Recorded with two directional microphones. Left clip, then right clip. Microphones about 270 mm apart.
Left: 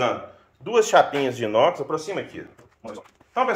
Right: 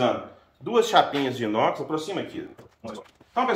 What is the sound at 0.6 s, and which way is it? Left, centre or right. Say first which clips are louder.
Speech: left 2 dB; left.